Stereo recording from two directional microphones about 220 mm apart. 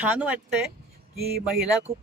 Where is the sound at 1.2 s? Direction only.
45° right (ahead or behind).